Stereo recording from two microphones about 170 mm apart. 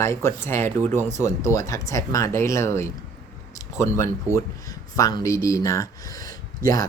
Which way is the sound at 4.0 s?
15° left (ahead or behind).